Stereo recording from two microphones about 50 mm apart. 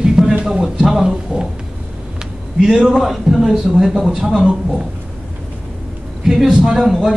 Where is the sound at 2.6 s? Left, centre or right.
Centre.